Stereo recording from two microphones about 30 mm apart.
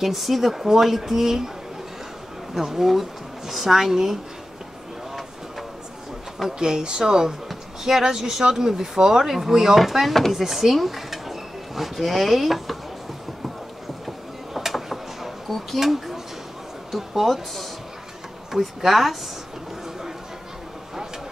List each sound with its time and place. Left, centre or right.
0.0 s speech: centre
2.5 s speech: centre
6.6 s a woman's voice: right; by 12.7 s centre
14.0 s a sound: centre
15.8 s speech: centre
18.5 s speech: centre